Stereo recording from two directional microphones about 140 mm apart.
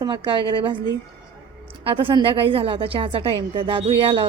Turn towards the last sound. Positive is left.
turn(degrees=-40)  # may be behind; listen again after turning